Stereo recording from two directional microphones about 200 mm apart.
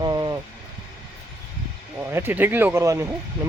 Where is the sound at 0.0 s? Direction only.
20° right (ahead or behind).